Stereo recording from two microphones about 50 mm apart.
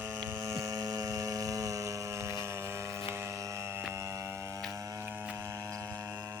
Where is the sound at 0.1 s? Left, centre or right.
Right.